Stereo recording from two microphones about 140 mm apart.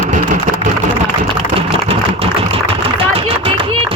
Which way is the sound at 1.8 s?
45° right (ahead or behind).